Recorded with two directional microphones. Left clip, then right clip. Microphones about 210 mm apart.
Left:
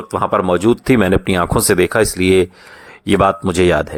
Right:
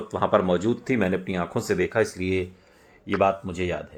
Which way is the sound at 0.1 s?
25° left (ahead or behind).